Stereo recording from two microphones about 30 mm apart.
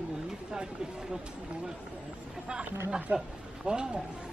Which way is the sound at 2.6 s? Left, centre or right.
Right.